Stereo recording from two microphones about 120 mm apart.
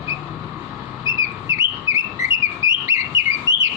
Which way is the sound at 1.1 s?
30° right (ahead or behind).